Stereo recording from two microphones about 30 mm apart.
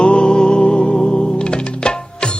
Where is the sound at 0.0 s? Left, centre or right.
Left.